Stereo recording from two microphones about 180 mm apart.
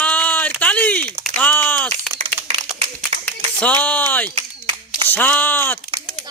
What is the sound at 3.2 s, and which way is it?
A man's voice, 10° left (ahead or behind).